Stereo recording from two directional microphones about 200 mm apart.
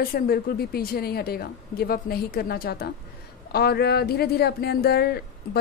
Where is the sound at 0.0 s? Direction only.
50° left (ahead or behind).